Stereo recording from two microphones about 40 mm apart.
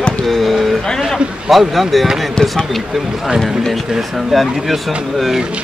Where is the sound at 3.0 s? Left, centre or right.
Centre.